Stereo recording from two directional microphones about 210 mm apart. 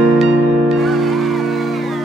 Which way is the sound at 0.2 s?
Centre (ahead or behind).